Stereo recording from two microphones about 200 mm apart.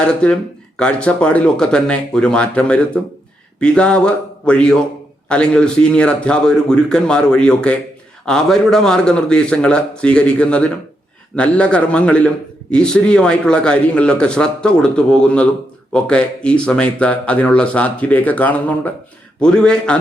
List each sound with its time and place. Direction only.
0.0 s a man's voice: 5° left (ahead or behind)